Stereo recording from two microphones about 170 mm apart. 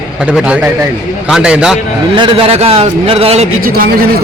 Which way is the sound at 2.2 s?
30° right (ahead or behind).